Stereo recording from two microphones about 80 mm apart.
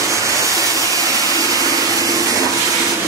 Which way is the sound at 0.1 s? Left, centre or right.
Right.